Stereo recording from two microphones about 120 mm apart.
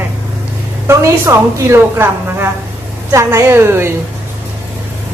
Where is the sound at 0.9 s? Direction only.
25° right (ahead or behind).